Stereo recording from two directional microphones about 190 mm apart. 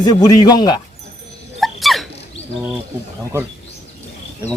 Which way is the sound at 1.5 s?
Centre (ahead or behind).